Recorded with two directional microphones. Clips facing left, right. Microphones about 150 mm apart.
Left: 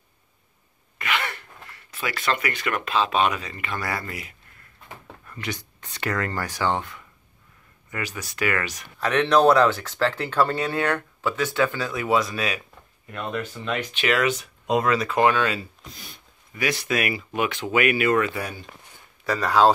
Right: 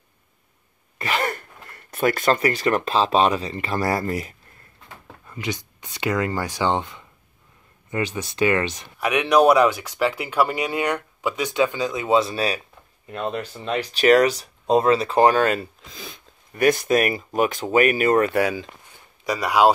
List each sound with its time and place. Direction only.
0.9 s speech: 35° right (ahead or behind)
5.2 s speech: 15° right (ahead or behind)
9.0 s speech: 10° right (ahead or behind); by 18.3 s 40° right (ahead or behind)
18.3 s speech: 90° right
19.2 s speech: 15° right (ahead or behind)